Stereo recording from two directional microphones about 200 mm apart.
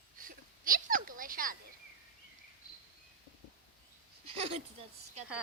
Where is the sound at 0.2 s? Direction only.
45° right (ahead or behind).